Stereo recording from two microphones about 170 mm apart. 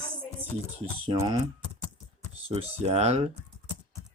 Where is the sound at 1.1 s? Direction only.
25° right (ahead or behind).